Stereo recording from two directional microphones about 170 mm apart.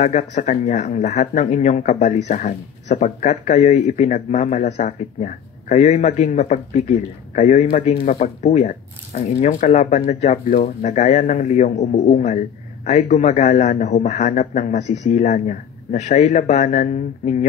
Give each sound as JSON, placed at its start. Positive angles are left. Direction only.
{"t": 0.0, "sound": "speech", "side_deg": 45}